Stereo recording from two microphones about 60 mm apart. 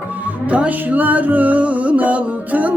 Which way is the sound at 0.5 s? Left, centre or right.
Right.